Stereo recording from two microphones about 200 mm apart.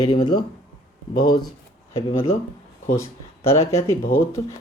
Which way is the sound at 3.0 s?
15° left (ahead or behind).